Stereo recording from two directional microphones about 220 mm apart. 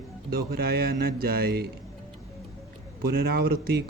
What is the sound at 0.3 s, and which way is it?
Speech, 45° right (ahead or behind).